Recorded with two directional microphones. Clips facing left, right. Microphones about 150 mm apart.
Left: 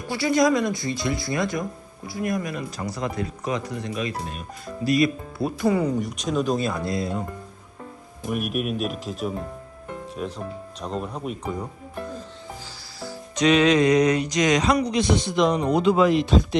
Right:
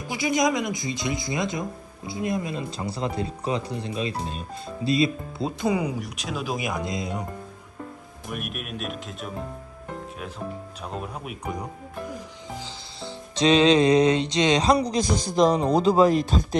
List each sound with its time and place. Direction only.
0.1 s speech: 15° right (ahead or behind)
6.0 s speech: centre (ahead or behind); by 7.3 s 15° right (ahead or behind)
8.3 s speech: centre (ahead or behind)
12.6 s music: 25° right (ahead or behind); by 16.6 s 40° right (ahead or behind)